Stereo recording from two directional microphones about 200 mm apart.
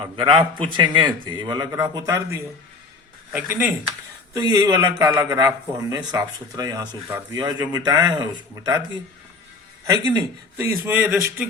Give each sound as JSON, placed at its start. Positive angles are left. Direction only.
{"t": 0.0, "sound": "a man's voice", "side_deg": -25}
{"t": 9.8, "sound": "a man's voice", "side_deg": -20}